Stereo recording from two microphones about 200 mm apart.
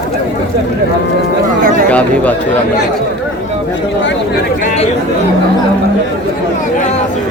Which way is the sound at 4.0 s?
65° left (ahead or behind).